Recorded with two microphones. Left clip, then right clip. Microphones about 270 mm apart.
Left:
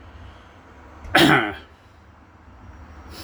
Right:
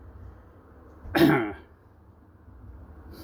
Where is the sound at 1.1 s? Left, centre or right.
Centre.